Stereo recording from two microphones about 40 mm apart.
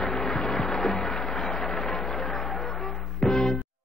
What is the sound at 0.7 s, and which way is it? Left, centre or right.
Music, centre.